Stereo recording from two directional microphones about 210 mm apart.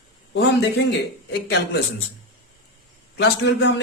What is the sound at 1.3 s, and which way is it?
Speech, 50° left (ahead or behind).